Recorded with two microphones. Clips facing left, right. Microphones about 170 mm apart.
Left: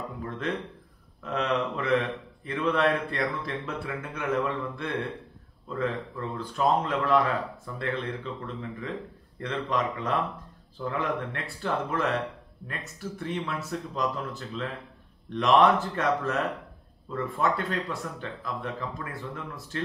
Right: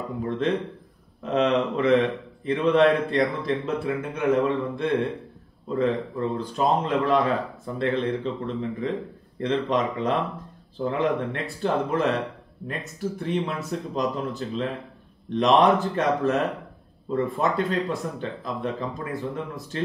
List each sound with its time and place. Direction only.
0.2 s a man's voice: 25° right (ahead or behind)